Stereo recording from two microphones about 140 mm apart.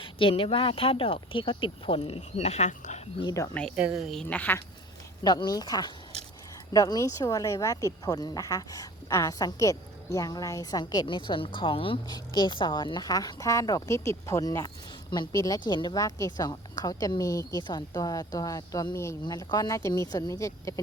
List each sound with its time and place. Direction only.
0.0 s speech: 40° left (ahead or behind); by 3.0 s 55° left (ahead or behind)
3.2 s speech: 25° left (ahead or behind)
3.5 s speech: 5° left (ahead or behind)
3.8 s a woman's voice: 5° right (ahead or behind); by 4.6 s 10° left (ahead or behind)
5.2 s speech: 30° left (ahead or behind)